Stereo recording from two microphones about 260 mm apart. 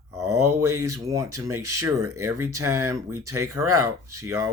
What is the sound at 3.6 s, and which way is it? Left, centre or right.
Speech, right.